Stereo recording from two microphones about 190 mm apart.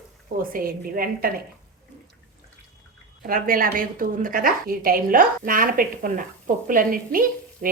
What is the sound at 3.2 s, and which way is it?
A woman's voice, 50° right (ahead or behind).